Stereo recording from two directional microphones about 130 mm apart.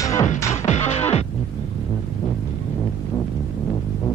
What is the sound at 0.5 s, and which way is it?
Music, 60° left (ahead or behind).